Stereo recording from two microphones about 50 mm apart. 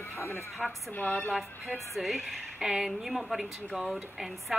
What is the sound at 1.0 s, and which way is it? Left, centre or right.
Speech, left.